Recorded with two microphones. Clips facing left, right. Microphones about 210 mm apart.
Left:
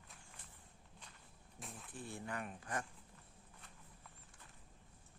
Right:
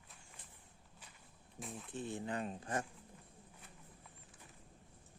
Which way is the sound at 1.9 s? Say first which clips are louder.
Right 5 dB; 20° right (ahead or behind).